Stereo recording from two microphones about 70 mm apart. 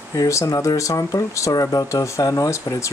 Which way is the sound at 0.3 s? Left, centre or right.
Left.